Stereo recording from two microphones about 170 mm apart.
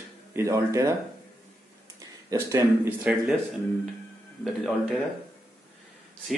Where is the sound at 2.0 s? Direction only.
20° right (ahead or behind).